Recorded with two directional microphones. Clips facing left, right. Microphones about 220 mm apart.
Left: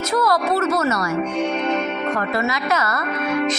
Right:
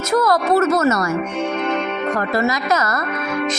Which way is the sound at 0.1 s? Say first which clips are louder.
Right 4 dB; 45° right (ahead or behind).